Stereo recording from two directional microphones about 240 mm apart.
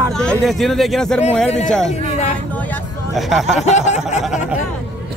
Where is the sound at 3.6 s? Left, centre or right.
Left.